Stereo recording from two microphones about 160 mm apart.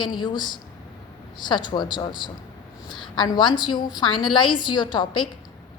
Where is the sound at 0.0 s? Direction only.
30° left (ahead or behind).